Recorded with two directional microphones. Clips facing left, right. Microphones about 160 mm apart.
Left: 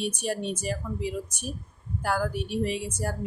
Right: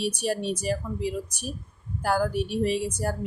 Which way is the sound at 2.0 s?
35° right (ahead or behind).